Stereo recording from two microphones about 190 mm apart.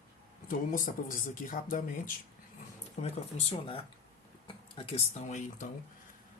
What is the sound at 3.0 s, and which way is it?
Speech, 35° left (ahead or behind).